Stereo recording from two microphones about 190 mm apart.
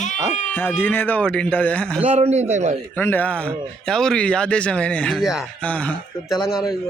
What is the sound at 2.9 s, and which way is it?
A man's voice, 10° left (ahead or behind).